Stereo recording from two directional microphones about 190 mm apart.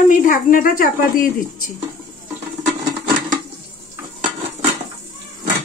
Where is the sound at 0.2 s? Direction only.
45° left (ahead or behind).